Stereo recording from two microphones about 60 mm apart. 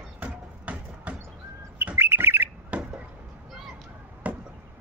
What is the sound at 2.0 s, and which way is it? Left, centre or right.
Bird, right.